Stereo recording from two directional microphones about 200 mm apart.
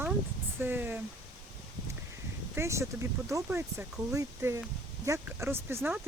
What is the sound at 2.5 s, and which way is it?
Speech, 15° right (ahead or behind).